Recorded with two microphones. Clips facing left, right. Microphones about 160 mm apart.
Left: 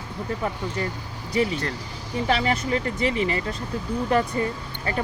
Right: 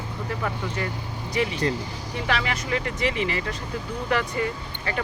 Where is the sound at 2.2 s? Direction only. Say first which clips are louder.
Left 4 dB; 35° left (ahead or behind).